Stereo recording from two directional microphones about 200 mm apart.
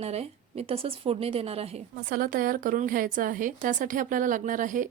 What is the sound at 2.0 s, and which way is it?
A woman's voice, 45° right (ahead or behind).